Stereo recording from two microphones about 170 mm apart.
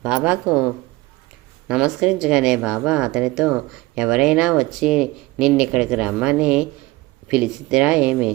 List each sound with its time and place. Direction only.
0.0 s speech: 5° right (ahead or behind)
1.6 s speech: 5° right (ahead or behind)